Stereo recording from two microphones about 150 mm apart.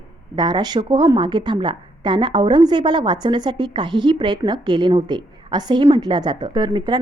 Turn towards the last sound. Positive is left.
turn(degrees=-30)  # may be behind; listen again after turning